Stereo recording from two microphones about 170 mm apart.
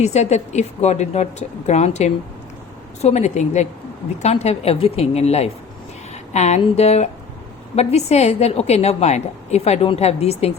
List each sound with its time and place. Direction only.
0.0 s a woman's voice: 40° left (ahead or behind)